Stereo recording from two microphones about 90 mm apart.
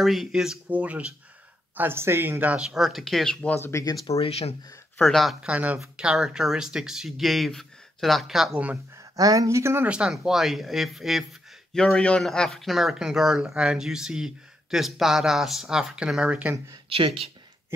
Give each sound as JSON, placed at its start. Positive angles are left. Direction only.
{"t": 0.0, "sound": "speech", "side_deg": 0}
{"t": 0.7, "sound": "speech", "side_deg": -15}
{"t": 1.8, "sound": "speech", "side_deg": -25}
{"t": 2.7, "sound": "speech", "side_deg": 0}
{"t": 3.5, "sound": "speech", "side_deg": 30}
{"t": 3.8, "sound": "speech", "side_deg": 40}
{"t": 5.0, "sound": "speech", "side_deg": 0}
{"t": 5.5, "sound": "speech", "side_deg": -15}
{"t": 5.8, "sound": "speech", "side_deg": -5}
{"t": 8.9, "sound": "speech", "side_deg": -40}
{"t": 9.8, "sound": "speech", "side_deg": -10}
{"t": 11.7, "sound": "speech", "side_deg": 10}
{"t": 16.5, "sound": "speech", "side_deg": -40}
{"t": 16.9, "sound": "speech", "side_deg": -85}